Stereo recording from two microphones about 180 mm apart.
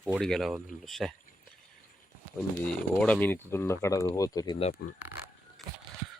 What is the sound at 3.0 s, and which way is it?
Speech, 10° left (ahead or behind).